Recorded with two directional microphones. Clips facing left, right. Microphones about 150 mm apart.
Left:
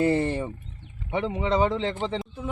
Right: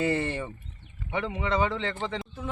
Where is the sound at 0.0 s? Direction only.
35° left (ahead or behind).